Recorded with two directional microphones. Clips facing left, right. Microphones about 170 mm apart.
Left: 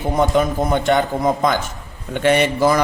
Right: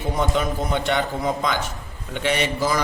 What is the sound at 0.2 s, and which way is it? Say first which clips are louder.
A man's voice: left 7 dB; 50° left (ahead or behind).